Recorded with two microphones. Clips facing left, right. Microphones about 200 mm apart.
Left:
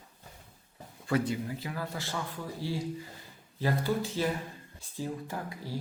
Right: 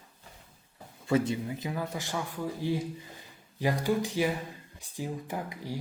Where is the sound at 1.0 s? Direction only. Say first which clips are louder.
Right 2 dB; 20° right (ahead or behind).